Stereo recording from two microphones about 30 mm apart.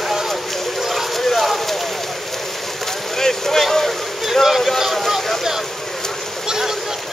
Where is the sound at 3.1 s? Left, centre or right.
Centre.